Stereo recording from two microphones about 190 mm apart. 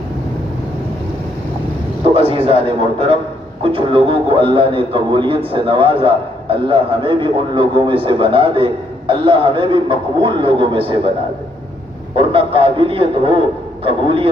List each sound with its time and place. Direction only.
2.1 s a man's voice: 30° right (ahead or behind)
12.1 s a man's voice: 30° right (ahead or behind)